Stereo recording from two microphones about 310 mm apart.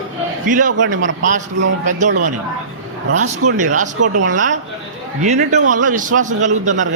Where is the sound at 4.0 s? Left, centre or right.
Right.